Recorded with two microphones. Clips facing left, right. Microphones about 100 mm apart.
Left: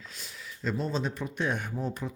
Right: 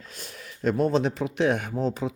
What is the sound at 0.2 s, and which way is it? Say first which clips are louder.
Speech: right 8 dB; 55° right (ahead or behind).